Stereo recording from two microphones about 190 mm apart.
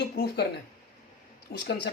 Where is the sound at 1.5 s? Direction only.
55° left (ahead or behind).